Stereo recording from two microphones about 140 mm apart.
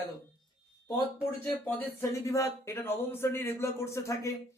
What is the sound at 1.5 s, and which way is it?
Speech, 10° left (ahead or behind).